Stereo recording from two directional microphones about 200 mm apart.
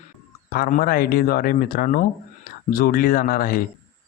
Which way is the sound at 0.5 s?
45° left (ahead or behind).